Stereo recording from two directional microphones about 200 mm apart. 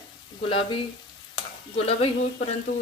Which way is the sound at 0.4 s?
25° left (ahead or behind).